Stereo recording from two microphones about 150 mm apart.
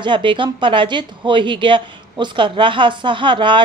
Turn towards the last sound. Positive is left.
turn(degrees=-35)  # may be behind; listen again after turning